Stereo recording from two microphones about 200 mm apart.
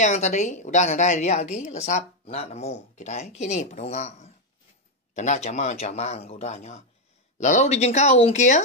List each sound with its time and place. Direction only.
0.0 s a woman's voice: 35° left (ahead or behind)